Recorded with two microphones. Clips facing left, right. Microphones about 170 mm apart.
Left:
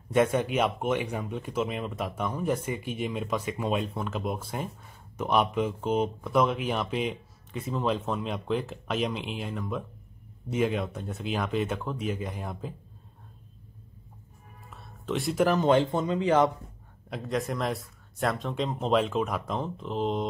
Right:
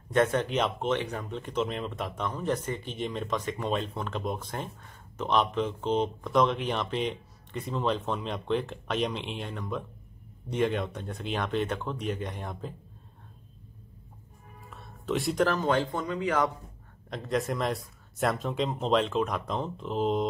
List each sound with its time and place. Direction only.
0.1 s speech: 10° left (ahead or behind)
14.7 s music: centre (ahead or behind)
15.4 s speech: 20° left (ahead or behind)
17.1 s speech: centre (ahead or behind)